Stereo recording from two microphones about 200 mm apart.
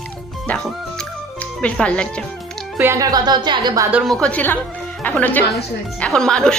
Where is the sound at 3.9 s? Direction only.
Centre (ahead or behind).